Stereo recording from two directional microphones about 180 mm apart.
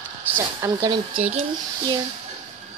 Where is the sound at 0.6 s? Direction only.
20° right (ahead or behind).